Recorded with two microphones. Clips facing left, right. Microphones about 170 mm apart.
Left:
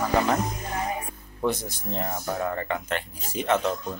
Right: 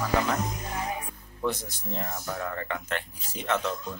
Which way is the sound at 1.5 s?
15° left (ahead or behind).